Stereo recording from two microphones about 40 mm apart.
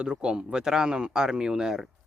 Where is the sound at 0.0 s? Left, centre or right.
Right.